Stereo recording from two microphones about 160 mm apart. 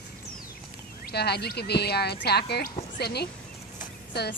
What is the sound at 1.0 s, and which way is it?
Speech, 85° left.